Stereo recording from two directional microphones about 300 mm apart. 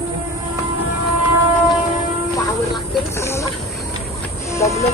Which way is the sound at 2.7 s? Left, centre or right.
Centre.